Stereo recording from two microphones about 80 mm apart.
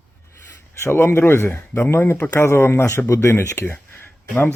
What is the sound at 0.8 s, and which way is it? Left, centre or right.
Speech, left.